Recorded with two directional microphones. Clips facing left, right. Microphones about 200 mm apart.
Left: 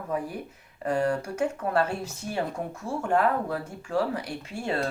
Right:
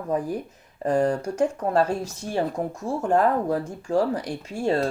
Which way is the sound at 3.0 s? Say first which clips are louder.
Right 3 dB; 40° right (ahead or behind).